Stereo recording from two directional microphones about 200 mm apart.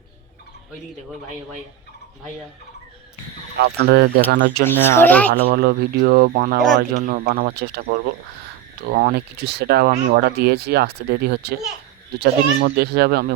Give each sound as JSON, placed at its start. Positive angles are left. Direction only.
{"t": 3.6, "sound": "speech", "side_deg": -55}
{"t": 4.6, "sound": "speech", "side_deg": 10}
{"t": 5.3, "sound": "speech", "side_deg": -50}